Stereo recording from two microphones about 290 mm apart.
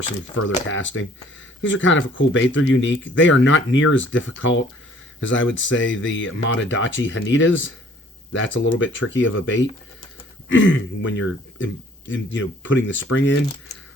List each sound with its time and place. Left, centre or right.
0.3 s speech: left